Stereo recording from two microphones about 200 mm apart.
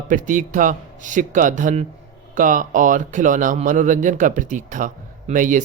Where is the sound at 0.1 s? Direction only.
40° right (ahead or behind).